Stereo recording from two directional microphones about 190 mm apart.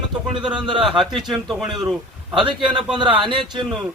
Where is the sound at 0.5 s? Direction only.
25° right (ahead or behind).